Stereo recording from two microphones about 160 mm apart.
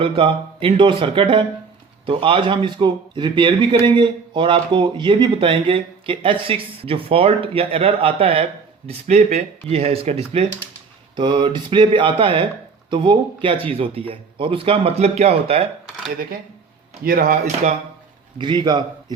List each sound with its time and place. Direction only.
0.0 s a man's voice: 35° right (ahead or behind)
17.0 s speech: 60° right (ahead or behind)
18.3 s a man's voice: 30° right (ahead or behind)